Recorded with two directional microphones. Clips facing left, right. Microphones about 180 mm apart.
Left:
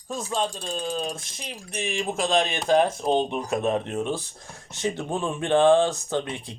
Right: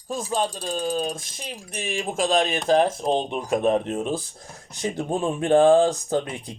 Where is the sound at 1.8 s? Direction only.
45° right (ahead or behind).